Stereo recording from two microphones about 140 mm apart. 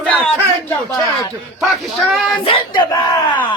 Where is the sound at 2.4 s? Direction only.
40° left (ahead or behind).